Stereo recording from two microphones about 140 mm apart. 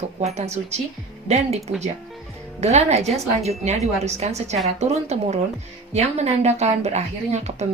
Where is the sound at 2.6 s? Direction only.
50° right (ahead or behind).